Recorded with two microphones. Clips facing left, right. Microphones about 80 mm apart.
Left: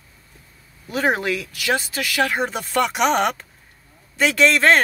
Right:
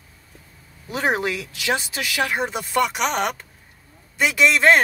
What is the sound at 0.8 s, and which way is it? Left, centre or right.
Speech, right.